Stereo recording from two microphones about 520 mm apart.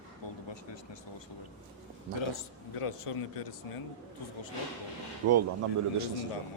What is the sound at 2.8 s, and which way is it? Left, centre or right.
Speech, left.